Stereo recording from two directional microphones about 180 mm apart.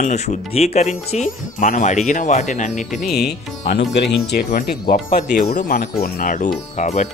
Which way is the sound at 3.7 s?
70° left (ahead or behind).